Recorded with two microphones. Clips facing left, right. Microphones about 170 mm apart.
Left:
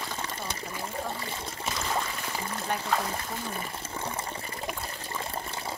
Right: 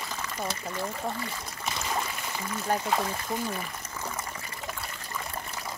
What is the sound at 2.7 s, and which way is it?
Speech, 35° right (ahead or behind).